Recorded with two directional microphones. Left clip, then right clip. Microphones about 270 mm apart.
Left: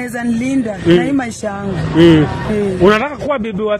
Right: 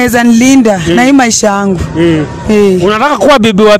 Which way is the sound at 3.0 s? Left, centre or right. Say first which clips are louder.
Right 13 dB; right.